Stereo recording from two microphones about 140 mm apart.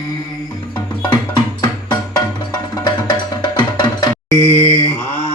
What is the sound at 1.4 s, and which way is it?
Music, 30° left (ahead or behind).